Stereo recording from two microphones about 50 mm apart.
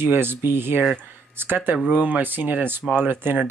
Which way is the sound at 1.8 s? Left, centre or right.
Right.